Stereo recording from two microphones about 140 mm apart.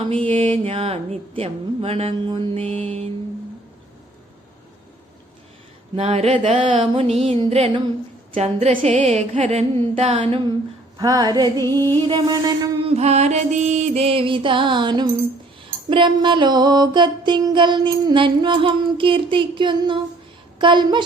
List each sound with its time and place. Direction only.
0.1 s speech: 40° right (ahead or behind)
6.0 s speech: 50° right (ahead or behind)
10.9 s music: 30° right (ahead or behind)
11.9 s a sound: 35° right (ahead or behind)
12.9 s speech: 50° right (ahead or behind); by 15.1 s 30° right (ahead or behind)
15.9 s a sound: 35° right (ahead or behind)